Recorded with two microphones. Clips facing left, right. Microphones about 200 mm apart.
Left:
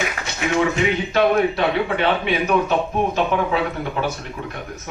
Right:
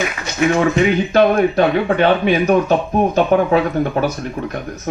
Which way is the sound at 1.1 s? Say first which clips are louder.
Right 3 dB; 45° right (ahead or behind).